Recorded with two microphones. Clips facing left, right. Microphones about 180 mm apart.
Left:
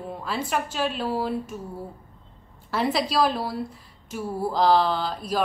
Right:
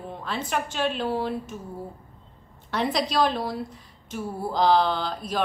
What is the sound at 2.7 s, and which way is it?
A woman's voice, 5° left (ahead or behind).